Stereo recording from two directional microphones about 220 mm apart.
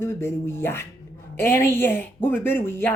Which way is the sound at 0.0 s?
10° left (ahead or behind).